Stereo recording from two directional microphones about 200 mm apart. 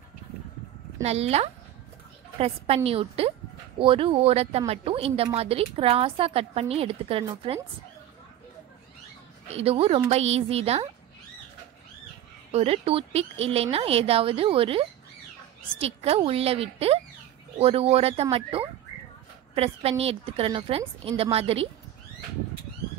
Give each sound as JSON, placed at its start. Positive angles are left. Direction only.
{"t": 1.0, "sound": "a woman's voice", "side_deg": -30}
{"t": 9.5, "sound": "a woman's voice", "side_deg": -30}
{"t": 12.4, "sound": "a woman's voice", "side_deg": -30}